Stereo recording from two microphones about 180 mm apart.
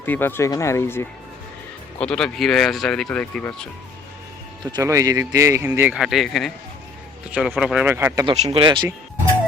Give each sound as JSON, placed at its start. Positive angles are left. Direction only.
{"t": 0.0, "sound": "speech", "side_deg": 10}
{"t": 4.6, "sound": "speech", "side_deg": -20}
{"t": 8.5, "sound": "speech", "side_deg": -25}